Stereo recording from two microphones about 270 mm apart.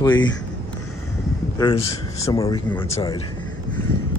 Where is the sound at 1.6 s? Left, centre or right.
Centre.